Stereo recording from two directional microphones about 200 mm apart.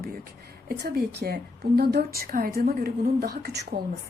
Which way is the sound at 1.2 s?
45° right (ahead or behind).